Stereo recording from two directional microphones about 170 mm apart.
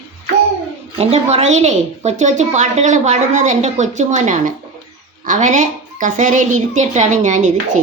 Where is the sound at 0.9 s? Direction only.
40° right (ahead or behind).